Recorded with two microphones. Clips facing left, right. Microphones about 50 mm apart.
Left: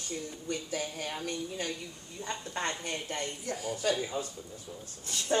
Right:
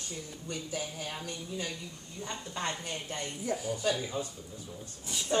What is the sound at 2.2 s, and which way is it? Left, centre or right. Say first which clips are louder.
A woman's voice: left 2 dB; left.